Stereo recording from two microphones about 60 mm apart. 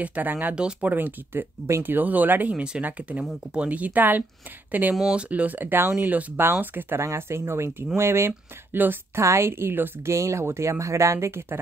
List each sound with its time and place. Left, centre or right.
0.0 s speech: right
0.6 s speech: centre
0.8 s speech: right
2.5 s speech: centre; by 7.0 s right
7.0 s a woman's voice: right
8.3 s speech: right
9.1 s a woman's voice: right
10.1 s speech: right